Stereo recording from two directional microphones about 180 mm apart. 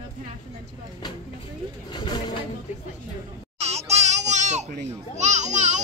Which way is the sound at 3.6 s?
35° right (ahead or behind).